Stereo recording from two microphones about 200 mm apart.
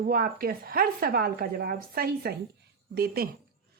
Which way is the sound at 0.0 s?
45° right (ahead or behind).